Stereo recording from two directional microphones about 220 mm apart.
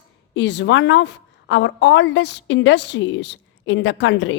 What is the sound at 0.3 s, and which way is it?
A woman's voice, 55° left (ahead or behind).